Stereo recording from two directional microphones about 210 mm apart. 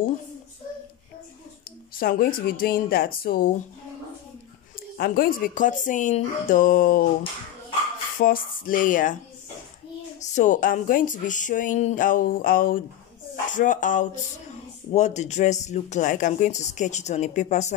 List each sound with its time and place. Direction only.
2.0 s speech: 45° left (ahead or behind)
4.9 s speech: 45° left (ahead or behind)
8.2 s speech: 40° left (ahead or behind)
10.2 s speech: 35° left (ahead or behind)